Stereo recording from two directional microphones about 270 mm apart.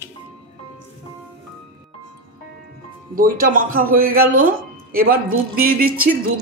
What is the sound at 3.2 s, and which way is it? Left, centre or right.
Speech, right.